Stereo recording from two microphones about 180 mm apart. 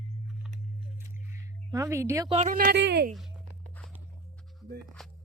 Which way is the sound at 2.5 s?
60° right (ahead or behind).